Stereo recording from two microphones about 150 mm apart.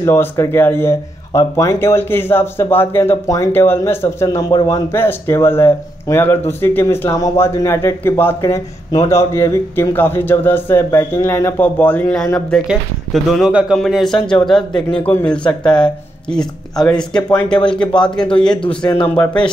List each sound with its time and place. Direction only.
0.0 s speech: 20° left (ahead or behind)